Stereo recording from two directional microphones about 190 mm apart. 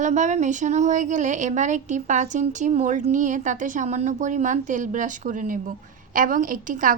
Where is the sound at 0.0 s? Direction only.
40° right (ahead or behind).